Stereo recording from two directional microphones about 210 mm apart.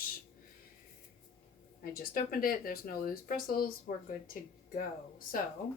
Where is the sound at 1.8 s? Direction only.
45° left (ahead or behind).